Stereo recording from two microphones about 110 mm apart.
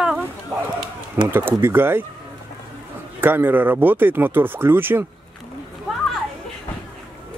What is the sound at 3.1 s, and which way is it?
Speech, 20° right (ahead or behind).